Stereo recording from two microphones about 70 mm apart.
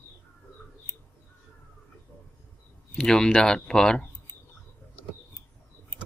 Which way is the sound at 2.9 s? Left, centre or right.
Centre.